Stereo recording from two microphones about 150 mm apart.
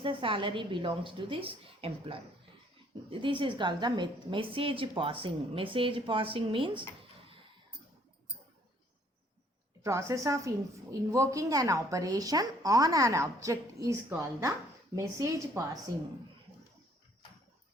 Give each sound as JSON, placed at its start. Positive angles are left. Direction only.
{"t": 0.0, "sound": "a woman's voice", "side_deg": -35}
{"t": 9.8, "sound": "a woman's voice", "side_deg": -20}